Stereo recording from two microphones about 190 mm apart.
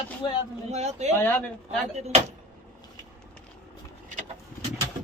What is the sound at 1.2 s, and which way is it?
Speech, 10° left (ahead or behind).